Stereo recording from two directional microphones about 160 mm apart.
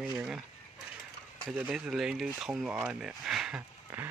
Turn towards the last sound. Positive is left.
turn(degrees=-10)  # may be behind; listen again after turning